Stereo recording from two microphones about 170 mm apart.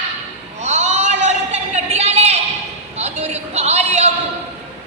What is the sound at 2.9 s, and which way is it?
Music, 40° right (ahead or behind).